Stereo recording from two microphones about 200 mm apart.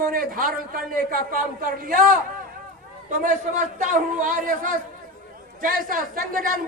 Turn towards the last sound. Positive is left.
turn(degrees=-45)  # may be behind; listen again after turning